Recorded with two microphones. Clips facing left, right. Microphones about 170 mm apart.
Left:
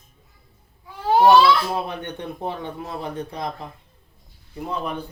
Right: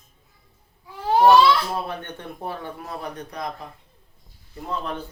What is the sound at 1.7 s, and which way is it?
A man's voice, 20° left (ahead or behind).